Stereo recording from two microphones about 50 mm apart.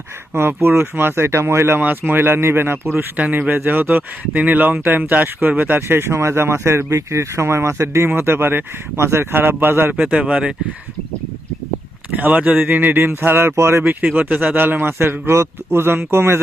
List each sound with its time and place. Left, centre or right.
0.3 s speech: right
1.8 s speech: right
3.7 s speech: right
8.1 s speech: right
10.0 s speech: right
12.1 s a man's voice: right
13.0 s speech: right
14.1 s a man's voice: right